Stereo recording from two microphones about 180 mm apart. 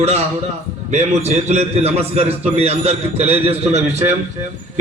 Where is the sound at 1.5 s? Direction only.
35° right (ahead or behind).